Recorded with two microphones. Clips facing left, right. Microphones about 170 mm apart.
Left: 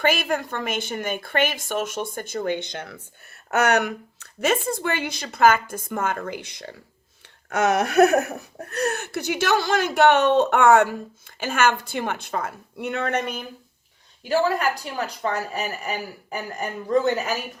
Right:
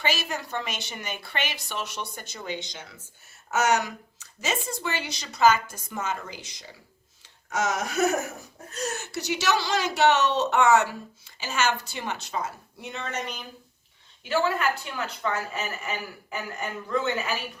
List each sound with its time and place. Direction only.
0.0 s a woman's voice: 55° left (ahead or behind)
14.3 s speech: 40° left (ahead or behind)